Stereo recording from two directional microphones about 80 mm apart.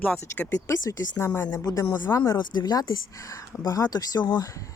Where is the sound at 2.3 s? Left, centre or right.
Left.